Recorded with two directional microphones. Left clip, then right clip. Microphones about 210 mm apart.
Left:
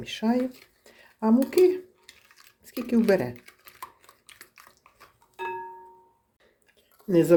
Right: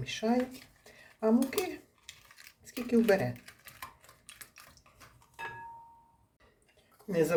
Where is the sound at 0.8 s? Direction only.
45° left (ahead or behind).